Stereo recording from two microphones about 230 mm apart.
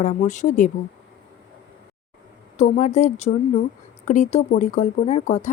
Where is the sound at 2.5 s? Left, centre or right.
Left.